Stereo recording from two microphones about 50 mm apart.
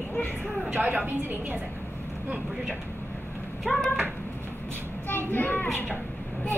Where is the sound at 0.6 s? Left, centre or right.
Right.